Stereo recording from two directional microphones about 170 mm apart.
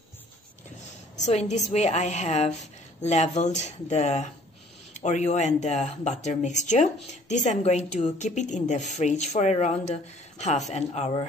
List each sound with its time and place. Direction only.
1.2 s a woman's voice: 40° left (ahead or behind)